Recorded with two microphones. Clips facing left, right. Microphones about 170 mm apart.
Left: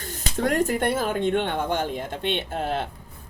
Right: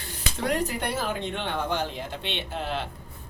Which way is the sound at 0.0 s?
45° left (ahead or behind).